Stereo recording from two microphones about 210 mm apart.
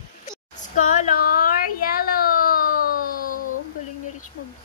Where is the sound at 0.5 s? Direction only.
35° left (ahead or behind).